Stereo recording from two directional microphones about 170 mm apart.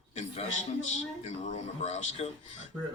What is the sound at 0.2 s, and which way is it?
A man's voice, 45° left (ahead or behind).